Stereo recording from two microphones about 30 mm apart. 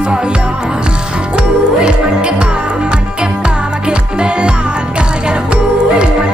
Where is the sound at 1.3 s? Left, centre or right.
Right.